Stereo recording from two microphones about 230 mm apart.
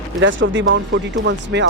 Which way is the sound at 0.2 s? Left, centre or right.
Right.